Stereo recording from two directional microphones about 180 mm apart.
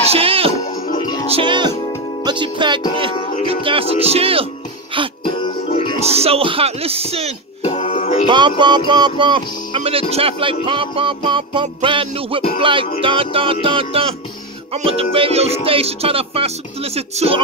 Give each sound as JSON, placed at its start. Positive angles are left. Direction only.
{"t": 0.1, "sound": "music", "side_deg": -30}
{"t": 1.3, "sound": "speech", "side_deg": -25}
{"t": 3.6, "sound": "music", "side_deg": -30}
{"t": 5.2, "sound": "music", "side_deg": 30}
{"t": 5.9, "sound": "music", "side_deg": -35}
{"t": 7.6, "sound": "music", "side_deg": 40}
{"t": 8.3, "sound": "speech", "side_deg": -25}
{"t": 13.0, "sound": "music", "side_deg": -30}